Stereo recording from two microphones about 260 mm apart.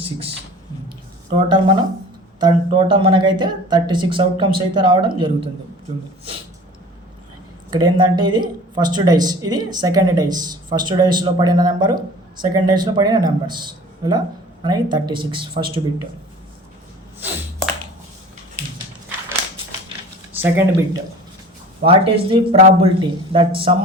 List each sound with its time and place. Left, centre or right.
1.5 s speech: centre
7.7 s speech: centre
20.3 s speech: centre
21.8 s speech: right